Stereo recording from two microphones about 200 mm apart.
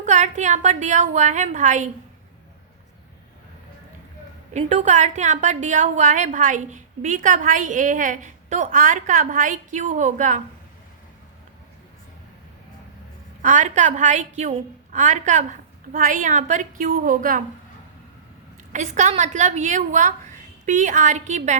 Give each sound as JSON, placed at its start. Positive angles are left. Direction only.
{"t": 0.0, "sound": "a woman's voice", "side_deg": -35}
{"t": 4.5, "sound": "a woman's voice", "side_deg": -35}
{"t": 13.4, "sound": "a woman's voice", "side_deg": -40}
{"t": 18.7, "sound": "a woman's voice", "side_deg": -35}